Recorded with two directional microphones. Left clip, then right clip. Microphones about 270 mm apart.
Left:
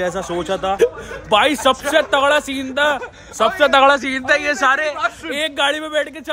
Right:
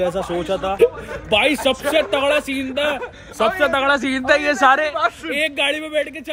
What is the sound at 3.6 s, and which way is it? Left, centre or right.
Speech, left.